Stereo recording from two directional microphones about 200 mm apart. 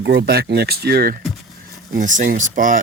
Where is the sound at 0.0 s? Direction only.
55° right (ahead or behind).